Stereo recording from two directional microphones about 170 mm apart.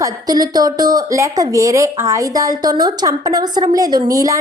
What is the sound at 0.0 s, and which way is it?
A woman's voice, 20° right (ahead or behind).